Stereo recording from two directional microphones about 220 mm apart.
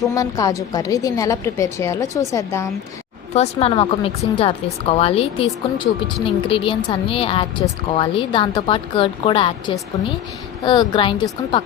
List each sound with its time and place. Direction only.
0.1 s a woman's voice: 15° left (ahead or behind)
3.3 s a woman's voice: 30° left (ahead or behind)